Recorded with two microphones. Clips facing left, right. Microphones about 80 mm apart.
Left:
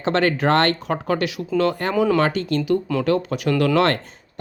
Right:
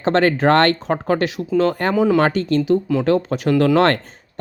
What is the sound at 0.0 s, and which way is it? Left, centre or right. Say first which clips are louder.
Speech: right 4 dB; right.